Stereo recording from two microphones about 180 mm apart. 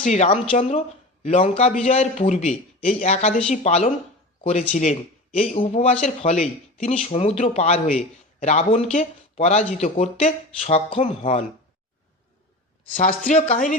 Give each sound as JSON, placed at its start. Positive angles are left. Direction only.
{"t": 0.0, "sound": "speech", "side_deg": 40}
{"t": 13.0, "sound": "speech", "side_deg": 45}